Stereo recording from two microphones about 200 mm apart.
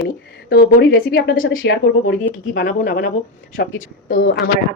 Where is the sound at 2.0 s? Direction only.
45° left (ahead or behind).